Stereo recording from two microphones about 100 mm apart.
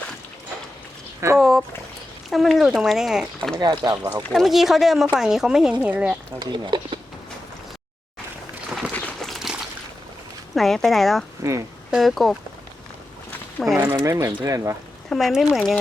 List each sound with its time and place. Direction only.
1.4 s speech: centre (ahead or behind)
3.6 s speech: 45° right (ahead or behind)
4.4 s speech: centre (ahead or behind)
6.4 s speech: 50° right (ahead or behind)
8.9 s a sound: 15° left (ahead or behind)
9.2 s a sound: centre (ahead or behind)
10.5 s speech: centre (ahead or behind)
13.6 s speech: 10° left (ahead or behind)
13.9 s speech: 35° right (ahead or behind)
15.1 s speech: centre (ahead or behind)